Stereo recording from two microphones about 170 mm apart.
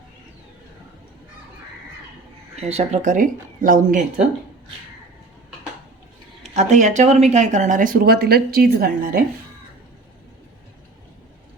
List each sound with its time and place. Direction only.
2.6 s speech: 40° right (ahead or behind)
6.5 s speech: 45° right (ahead or behind); by 9.2 s 60° right (ahead or behind)